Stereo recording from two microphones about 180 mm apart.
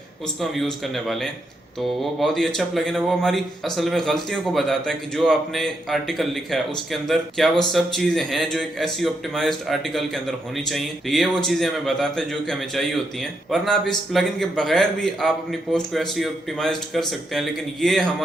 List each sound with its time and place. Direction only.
0.3 s speech: centre (ahead or behind)